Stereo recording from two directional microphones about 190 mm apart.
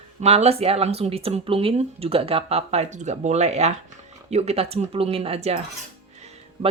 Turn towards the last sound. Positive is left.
turn(degrees=-35)  # may be behind; listen again after turning